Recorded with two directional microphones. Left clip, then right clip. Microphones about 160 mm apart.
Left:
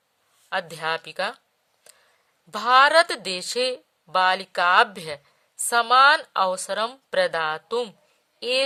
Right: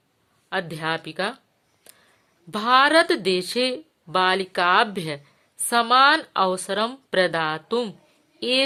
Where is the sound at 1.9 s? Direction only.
30° left (ahead or behind).